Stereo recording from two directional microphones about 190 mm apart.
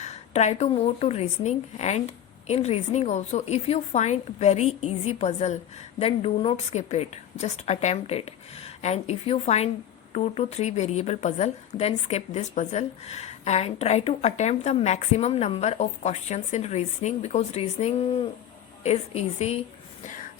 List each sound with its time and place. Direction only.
0.0 s a woman's voice: 35° left (ahead or behind)